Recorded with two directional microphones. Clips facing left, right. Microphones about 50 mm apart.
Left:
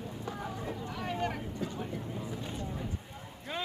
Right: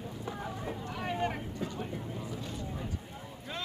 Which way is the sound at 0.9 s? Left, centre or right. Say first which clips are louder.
Right 2 dB; centre.